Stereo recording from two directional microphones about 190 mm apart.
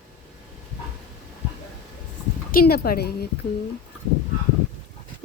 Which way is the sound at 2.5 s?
50° left (ahead or behind).